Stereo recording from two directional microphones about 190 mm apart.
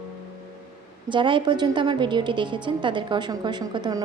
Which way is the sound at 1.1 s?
25° right (ahead or behind).